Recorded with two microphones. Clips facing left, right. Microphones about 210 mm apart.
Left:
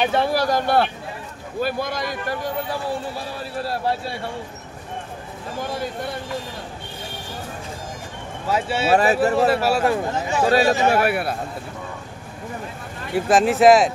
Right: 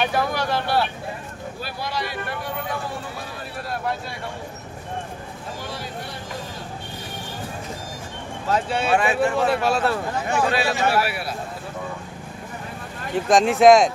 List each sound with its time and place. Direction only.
0.1 s a man's voice: 30° left (ahead or behind)
8.5 s speech: 5° left (ahead or behind)
8.9 s a man's voice: 40° left (ahead or behind)
9.5 s speech: 5° left (ahead or behind)
10.4 s a man's voice: 40° left (ahead or behind)
13.1 s speech: 5° left (ahead or behind)